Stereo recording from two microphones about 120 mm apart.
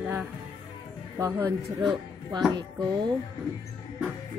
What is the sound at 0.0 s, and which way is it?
Music, 10° right (ahead or behind).